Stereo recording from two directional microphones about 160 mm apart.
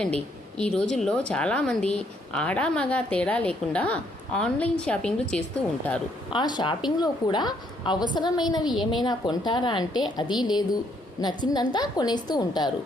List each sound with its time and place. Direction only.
0.0 s a woman's voice: 5° left (ahead or behind)
6.3 s a woman's voice: 30° left (ahead or behind)